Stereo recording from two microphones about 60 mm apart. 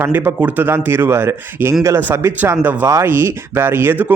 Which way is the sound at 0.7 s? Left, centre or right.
Right.